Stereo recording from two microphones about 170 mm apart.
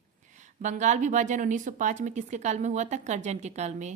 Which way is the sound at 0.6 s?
45° right (ahead or behind).